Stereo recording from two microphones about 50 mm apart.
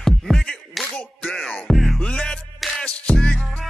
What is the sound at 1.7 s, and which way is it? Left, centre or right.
Music, centre.